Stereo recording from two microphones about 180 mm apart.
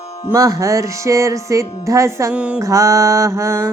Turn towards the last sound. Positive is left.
turn(degrees=-15)  # may be behind; listen again after turning